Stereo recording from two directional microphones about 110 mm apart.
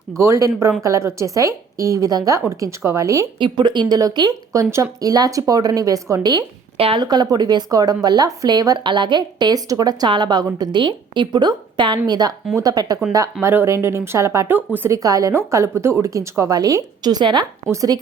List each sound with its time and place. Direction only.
0.2 s a woman's voice: 25° right (ahead or behind)
3.3 s a woman's voice: 50° right (ahead or behind); by 6.2 s 30° right (ahead or behind)
6.7 s speech: 60° right (ahead or behind)
7.0 s a woman's voice: 40° right (ahead or behind)
13.4 s a woman's voice: 20° right (ahead or behind)
14.9 s a woman's voice: 30° right (ahead or behind)